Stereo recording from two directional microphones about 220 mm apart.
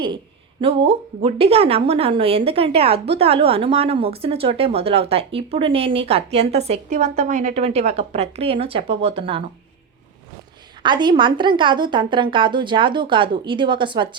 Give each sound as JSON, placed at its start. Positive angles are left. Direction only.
{"t": 0.6, "sound": "a woman's voice", "side_deg": -25}
{"t": 10.8, "sound": "a woman's voice", "side_deg": -20}